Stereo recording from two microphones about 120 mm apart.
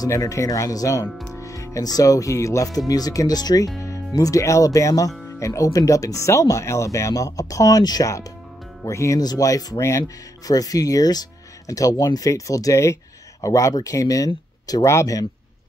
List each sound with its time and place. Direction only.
0.0 s speech: 25° left (ahead or behind)